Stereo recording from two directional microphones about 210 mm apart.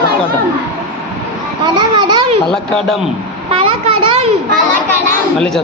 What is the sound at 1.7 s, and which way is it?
Children playing, 20° right (ahead or behind).